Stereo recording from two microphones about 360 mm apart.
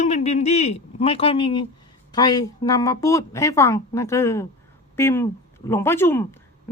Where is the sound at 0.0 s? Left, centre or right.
Centre.